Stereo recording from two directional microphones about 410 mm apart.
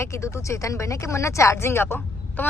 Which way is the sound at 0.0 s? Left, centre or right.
Centre.